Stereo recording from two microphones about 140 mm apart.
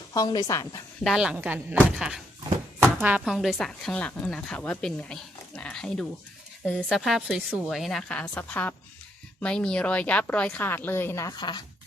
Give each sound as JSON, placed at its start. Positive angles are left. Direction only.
{"t": 0.1, "sound": "a woman's voice", "side_deg": 25}
{"t": 1.0, "sound": "a woman's voice", "side_deg": -5}